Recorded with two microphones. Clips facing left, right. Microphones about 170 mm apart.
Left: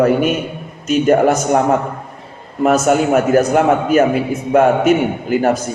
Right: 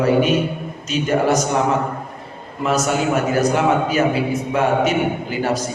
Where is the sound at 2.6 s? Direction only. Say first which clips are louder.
Left 6 dB; 50° left (ahead or behind).